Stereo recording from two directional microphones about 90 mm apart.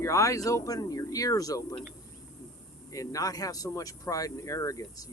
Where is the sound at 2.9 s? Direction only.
40° left (ahead or behind).